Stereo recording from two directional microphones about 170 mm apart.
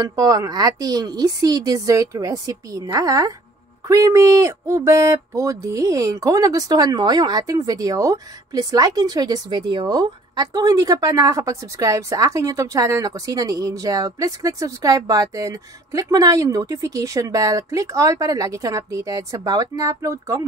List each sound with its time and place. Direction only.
0.0 s speech: 20° right (ahead or behind)